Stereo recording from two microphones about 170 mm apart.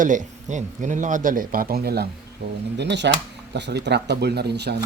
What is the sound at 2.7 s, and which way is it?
Speech, 90° right.